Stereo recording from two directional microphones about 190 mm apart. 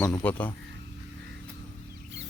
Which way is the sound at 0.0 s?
15° left (ahead or behind).